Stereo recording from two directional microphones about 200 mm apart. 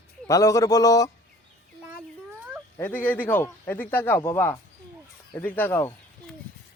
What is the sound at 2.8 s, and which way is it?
Speech, 10° left (ahead or behind).